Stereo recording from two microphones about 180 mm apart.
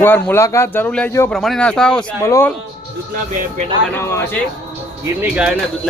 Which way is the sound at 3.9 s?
15° left (ahead or behind).